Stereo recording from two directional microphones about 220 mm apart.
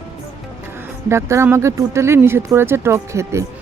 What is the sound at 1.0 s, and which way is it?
Speech, 10° right (ahead or behind).